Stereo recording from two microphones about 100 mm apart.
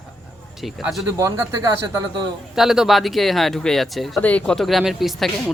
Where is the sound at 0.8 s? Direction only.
Centre (ahead or behind).